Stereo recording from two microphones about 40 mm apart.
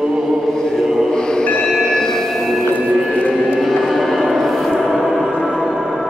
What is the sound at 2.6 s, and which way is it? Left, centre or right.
Music, left.